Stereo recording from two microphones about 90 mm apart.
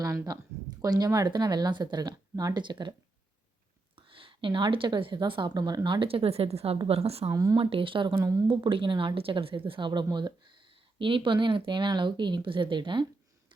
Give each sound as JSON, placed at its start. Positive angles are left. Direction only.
{"t": 0.8, "sound": "speech", "side_deg": -45}
{"t": 3.9, "sound": "a woman's voice", "side_deg": -70}
{"t": 7.3, "sound": "speech", "side_deg": -40}
{"t": 7.6, "sound": "a woman's voice", "side_deg": -75}